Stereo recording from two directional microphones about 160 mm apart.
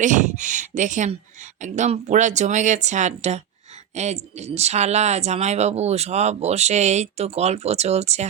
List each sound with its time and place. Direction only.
0.0 s speech: 50° right (ahead or behind)